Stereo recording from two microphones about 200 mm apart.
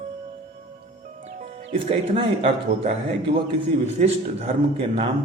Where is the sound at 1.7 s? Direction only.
30° right (ahead or behind).